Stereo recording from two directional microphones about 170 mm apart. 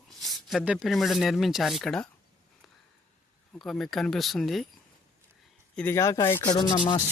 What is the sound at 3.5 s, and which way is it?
Speech, centre (ahead or behind).